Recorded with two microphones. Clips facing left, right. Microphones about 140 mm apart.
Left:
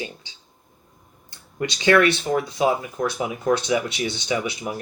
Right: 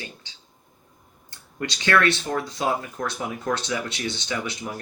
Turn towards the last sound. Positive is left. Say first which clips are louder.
# left 5 dB
turn(degrees=15)  # may be behind; listen again after turning